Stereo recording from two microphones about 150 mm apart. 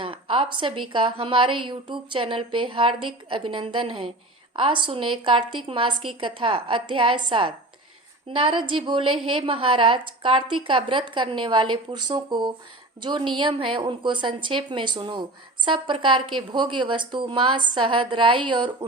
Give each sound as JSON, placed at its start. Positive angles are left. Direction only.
{"t": 0.0, "sound": "a woman's voice", "side_deg": -35}